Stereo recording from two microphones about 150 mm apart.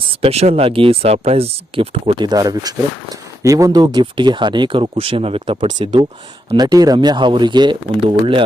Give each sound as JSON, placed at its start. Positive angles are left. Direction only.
{"t": 0.2, "sound": "speech", "side_deg": -45}
{"t": 2.2, "sound": "speech", "side_deg": -25}
{"t": 6.5, "sound": "speech", "side_deg": -25}